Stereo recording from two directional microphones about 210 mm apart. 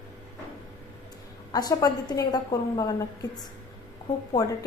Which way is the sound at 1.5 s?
15° left (ahead or behind).